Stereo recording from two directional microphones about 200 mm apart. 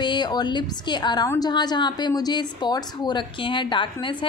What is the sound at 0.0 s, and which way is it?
A woman's voice, 20° left (ahead or behind).